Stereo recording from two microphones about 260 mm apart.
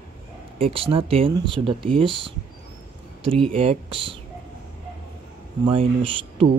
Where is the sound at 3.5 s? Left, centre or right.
Right.